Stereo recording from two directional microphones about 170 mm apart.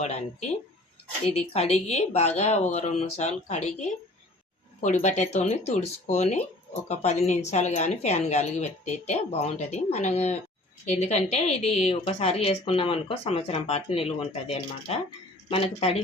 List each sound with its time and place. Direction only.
0.0 s speech: 40° left (ahead or behind)